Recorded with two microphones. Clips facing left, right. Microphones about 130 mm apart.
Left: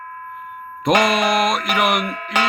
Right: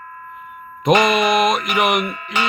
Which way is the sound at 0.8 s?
Centre (ahead or behind).